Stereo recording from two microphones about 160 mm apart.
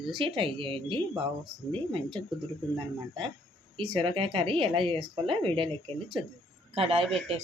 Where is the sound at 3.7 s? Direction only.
35° right (ahead or behind).